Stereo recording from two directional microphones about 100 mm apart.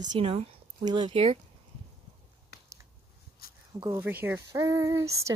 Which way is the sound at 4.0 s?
20° right (ahead or behind).